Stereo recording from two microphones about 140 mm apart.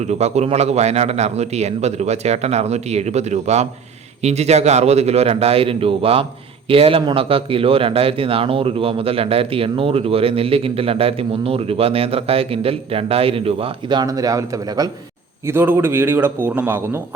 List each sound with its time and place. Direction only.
0.0 s speech: 50° right (ahead or behind)
14.0 s a man's voice: 25° right (ahead or behind)